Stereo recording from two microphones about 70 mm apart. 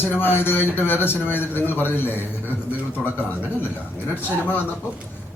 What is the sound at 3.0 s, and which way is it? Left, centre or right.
Speech, centre.